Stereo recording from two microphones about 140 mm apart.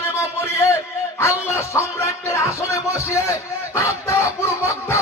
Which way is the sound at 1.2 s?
20° left (ahead or behind).